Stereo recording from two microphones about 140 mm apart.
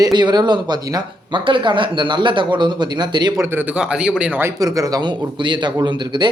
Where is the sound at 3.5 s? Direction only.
5° right (ahead or behind).